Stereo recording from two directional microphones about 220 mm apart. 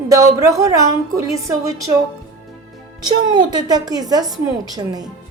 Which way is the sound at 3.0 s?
20° right (ahead or behind).